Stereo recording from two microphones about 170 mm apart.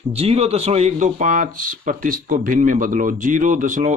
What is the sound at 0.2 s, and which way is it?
Speech, 35° right (ahead or behind).